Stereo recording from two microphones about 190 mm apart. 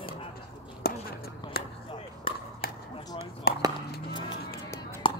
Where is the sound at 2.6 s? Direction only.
55° left (ahead or behind).